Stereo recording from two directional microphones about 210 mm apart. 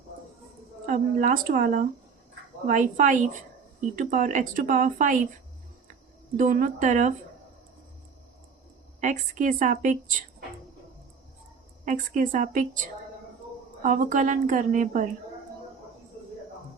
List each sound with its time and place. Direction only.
0.9 s speech: 40° right (ahead or behind)
6.3 s speech: 35° right (ahead or behind)
9.0 s speech: 35° right (ahead or behind)
11.9 s speech: 40° right (ahead or behind)
13.8 s speech: 35° right (ahead or behind)